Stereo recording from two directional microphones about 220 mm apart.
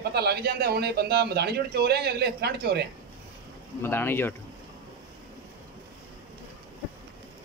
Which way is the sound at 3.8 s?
10° left (ahead or behind).